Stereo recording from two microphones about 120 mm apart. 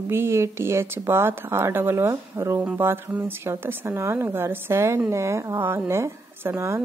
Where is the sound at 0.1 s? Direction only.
20° right (ahead or behind).